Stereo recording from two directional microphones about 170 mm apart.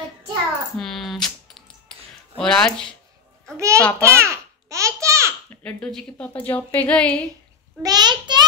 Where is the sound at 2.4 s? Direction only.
5° left (ahead or behind).